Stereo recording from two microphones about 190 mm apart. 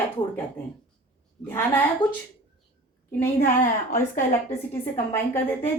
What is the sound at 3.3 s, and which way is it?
Speech, 40° left (ahead or behind).